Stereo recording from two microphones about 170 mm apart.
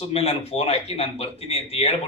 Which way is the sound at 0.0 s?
35° left (ahead or behind).